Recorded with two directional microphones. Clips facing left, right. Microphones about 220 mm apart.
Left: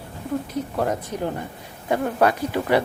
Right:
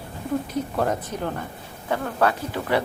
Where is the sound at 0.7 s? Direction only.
15° left (ahead or behind).